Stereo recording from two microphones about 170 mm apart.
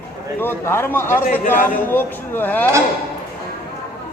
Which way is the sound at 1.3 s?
50° left (ahead or behind).